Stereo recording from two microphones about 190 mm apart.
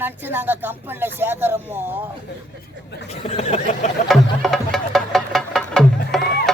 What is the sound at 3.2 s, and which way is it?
Speech, 35° left (ahead or behind).